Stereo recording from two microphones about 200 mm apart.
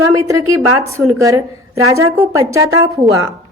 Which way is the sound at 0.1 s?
15° right (ahead or behind).